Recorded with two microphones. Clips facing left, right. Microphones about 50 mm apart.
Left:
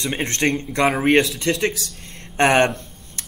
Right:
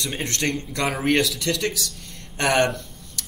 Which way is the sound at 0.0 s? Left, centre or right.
Left.